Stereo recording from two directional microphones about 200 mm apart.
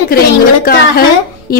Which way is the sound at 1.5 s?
45° left (ahead or behind).